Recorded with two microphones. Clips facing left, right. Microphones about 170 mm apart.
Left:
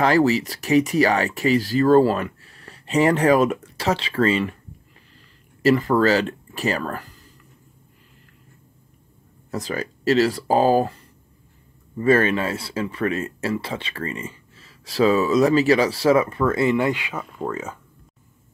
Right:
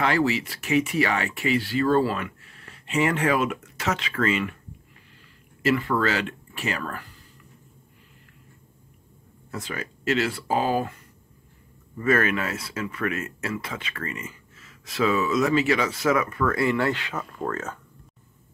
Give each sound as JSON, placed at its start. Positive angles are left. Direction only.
{"t": 0.0, "sound": "speech", "side_deg": 40}
{"t": 5.6, "sound": "speech", "side_deg": 40}
{"t": 9.5, "sound": "speech", "side_deg": 35}
{"t": 12.0, "sound": "speech", "side_deg": 30}